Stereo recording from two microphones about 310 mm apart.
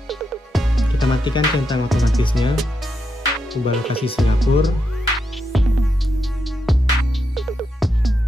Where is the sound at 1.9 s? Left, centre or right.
Centre.